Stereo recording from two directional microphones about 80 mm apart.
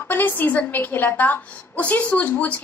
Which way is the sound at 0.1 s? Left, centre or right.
Left.